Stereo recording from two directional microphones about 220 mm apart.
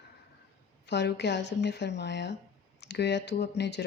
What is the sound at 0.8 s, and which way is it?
Speech, 50° left (ahead or behind).